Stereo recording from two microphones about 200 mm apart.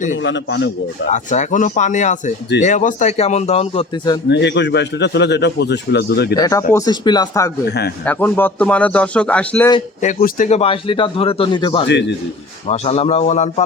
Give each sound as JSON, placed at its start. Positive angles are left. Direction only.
{"t": 0.2, "sound": "a man's voice", "side_deg": 65}
{"t": 1.1, "sound": "a man's voice", "side_deg": 35}
{"t": 4.3, "sound": "a man's voice", "side_deg": 60}
{"t": 6.3, "sound": "speech", "side_deg": 15}
{"t": 7.7, "sound": "speech", "side_deg": 55}
{"t": 8.0, "sound": "speech", "side_deg": 10}
{"t": 10.0, "sound": "speech", "side_deg": 40}
{"t": 11.9, "sound": "a man's voice", "side_deg": 60}
{"t": 12.6, "sound": "a man's voice", "side_deg": 30}